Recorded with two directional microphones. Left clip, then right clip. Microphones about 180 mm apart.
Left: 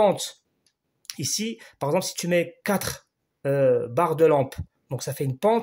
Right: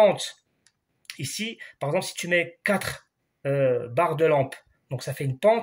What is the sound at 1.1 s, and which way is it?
Speech, 30° left (ahead or behind).